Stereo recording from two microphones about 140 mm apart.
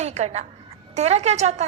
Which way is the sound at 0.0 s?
55° right (ahead or behind).